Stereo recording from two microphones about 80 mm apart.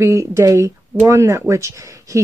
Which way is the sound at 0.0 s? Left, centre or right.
Right.